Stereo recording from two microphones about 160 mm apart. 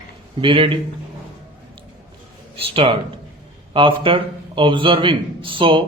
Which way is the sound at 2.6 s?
35° right (ahead or behind).